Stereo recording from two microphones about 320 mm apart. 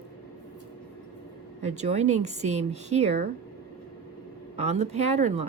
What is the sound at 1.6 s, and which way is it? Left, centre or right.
Speech, right.